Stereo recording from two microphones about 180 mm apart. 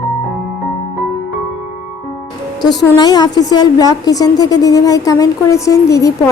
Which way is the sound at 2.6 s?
25° left (ahead or behind).